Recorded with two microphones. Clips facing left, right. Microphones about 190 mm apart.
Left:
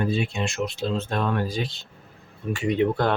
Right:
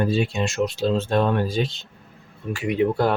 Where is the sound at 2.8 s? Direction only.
5° right (ahead or behind).